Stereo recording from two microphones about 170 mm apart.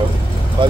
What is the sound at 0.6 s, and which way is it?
Speech, 30° right (ahead or behind).